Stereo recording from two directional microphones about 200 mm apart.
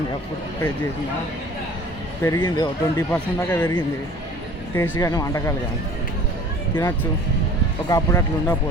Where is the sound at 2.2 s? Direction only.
20° left (ahead or behind).